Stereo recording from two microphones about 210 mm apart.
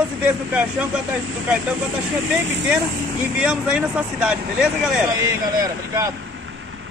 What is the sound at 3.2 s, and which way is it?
Speech, 5° right (ahead or behind).